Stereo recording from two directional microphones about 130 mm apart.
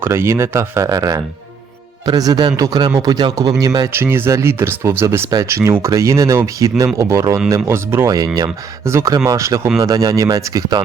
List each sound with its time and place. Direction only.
0.0 s speech: 20° right (ahead or behind)